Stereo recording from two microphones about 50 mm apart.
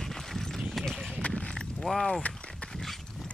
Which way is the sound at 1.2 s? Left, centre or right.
Left.